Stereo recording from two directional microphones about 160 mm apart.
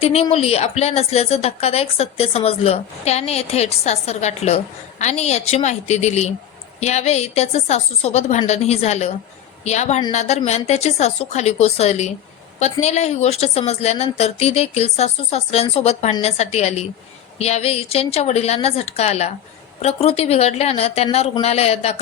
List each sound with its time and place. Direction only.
0.0 s a woman's voice: 40° left (ahead or behind)